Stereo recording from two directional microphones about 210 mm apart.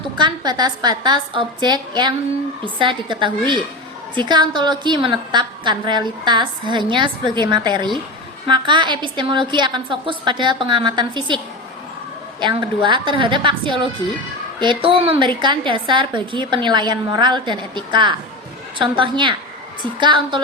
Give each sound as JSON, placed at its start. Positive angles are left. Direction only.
{"t": 0.2, "sound": "a woman's voice", "side_deg": -20}
{"t": 12.4, "sound": "a woman's voice", "side_deg": -20}